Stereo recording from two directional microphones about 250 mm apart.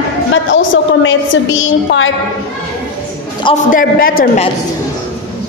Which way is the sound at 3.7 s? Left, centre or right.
Left.